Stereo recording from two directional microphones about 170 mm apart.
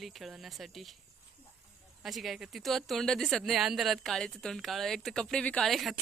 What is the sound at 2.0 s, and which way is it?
Speech, centre (ahead or behind).